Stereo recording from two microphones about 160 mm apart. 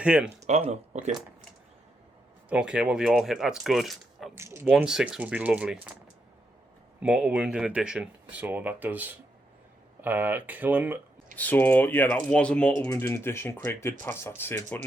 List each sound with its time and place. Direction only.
0.0 s speech: 5° right (ahead or behind)
0.4 s speech: 40° right (ahead or behind)
2.5 s speech: 5° right (ahead or behind)
4.4 s speech: 15° right (ahead or behind)
4.7 s speech: 5° right (ahead or behind)
7.0 s speech: 5° right (ahead or behind)
11.3 s speech: 10° left (ahead or behind)